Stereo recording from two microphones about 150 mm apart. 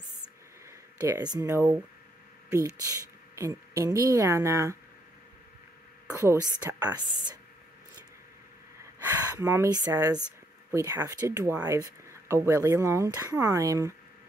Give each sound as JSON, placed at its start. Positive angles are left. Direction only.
{"t": 0.7, "sound": "a sound", "side_deg": -20}
{"t": 1.4, "sound": "speech", "side_deg": -15}
{"t": 6.1, "sound": "speech", "side_deg": -20}
{"t": 9.3, "sound": "speech", "side_deg": -20}